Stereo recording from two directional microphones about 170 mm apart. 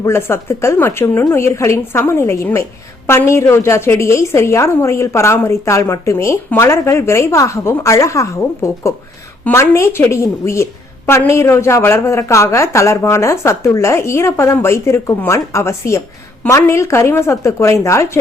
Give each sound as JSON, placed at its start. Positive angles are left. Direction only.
{"t": 0.0, "sound": "a woman's voice", "side_deg": 15}